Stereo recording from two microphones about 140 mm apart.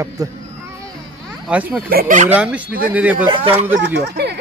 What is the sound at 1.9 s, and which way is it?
Speech, 80° right.